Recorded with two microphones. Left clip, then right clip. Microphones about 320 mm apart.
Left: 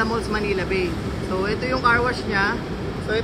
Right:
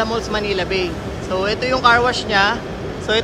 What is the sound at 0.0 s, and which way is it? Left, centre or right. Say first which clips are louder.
Speech: right 3 dB; centre.